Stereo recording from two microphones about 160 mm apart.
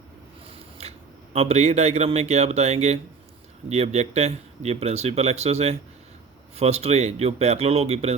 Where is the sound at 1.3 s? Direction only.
40° right (ahead or behind).